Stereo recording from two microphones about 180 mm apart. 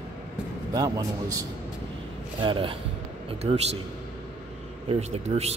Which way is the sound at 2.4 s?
30° right (ahead or behind).